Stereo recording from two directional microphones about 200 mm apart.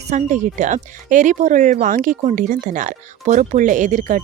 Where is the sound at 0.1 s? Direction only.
40° right (ahead or behind).